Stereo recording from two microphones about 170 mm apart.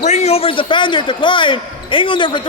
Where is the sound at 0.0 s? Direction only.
40° left (ahead or behind).